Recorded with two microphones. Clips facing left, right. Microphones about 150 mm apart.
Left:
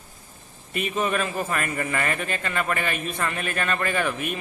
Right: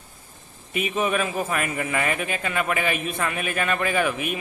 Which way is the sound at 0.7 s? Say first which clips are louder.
Right 1 dB; 5° right (ahead or behind).